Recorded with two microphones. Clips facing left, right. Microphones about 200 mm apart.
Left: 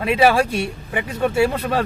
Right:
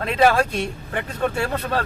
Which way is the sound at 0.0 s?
10° left (ahead or behind).